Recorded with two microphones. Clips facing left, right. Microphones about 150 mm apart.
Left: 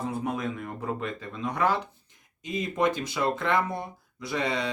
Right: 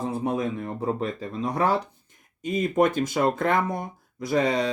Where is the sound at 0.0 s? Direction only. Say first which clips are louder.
Right 4 dB; 30° right (ahead or behind).